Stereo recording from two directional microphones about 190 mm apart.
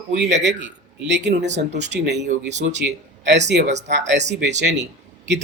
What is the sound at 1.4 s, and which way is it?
Speech, 35° right (ahead or behind).